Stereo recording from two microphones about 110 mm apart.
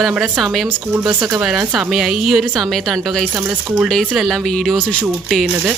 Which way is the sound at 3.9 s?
Centre (ahead or behind).